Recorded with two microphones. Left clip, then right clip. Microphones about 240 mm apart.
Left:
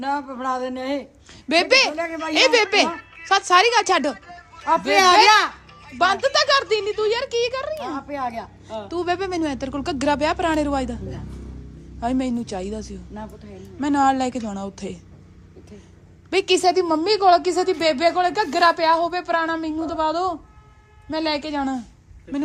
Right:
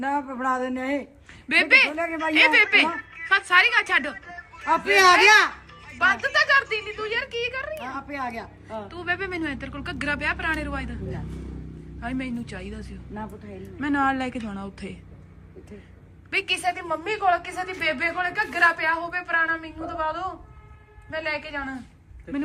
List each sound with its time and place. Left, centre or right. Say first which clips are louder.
0.0 s a man's voice: left 1 dB; centre; by 5.5 s left
6.2 s speech: left 2 dB; centre
7.9 s speech: left 4 dB; left
8.4 s a man's voice: left 3 dB; centre
11.9 s a man's voice: left 8 dB; centre
16.3 s a man's voice: left 7 dB; centre
21.3 s a man's voice: left 6 dB; centre